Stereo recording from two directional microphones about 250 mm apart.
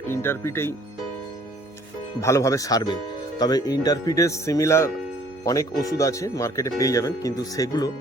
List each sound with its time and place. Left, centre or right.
0.1 s speech: centre
2.2 s speech: centre